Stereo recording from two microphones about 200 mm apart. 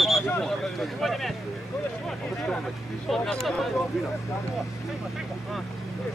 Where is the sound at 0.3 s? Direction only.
5° left (ahead or behind).